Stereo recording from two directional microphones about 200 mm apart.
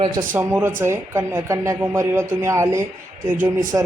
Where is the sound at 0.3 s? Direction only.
10° right (ahead or behind).